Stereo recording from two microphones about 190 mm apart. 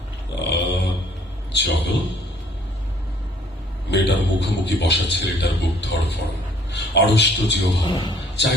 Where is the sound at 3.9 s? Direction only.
65° left (ahead or behind).